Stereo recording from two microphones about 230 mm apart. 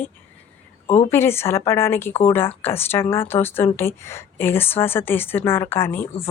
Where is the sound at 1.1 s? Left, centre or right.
Centre.